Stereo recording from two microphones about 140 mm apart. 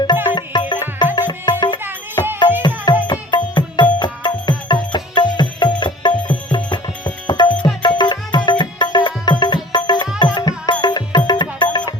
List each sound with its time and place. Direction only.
0.3 s music: 30° left (ahead or behind)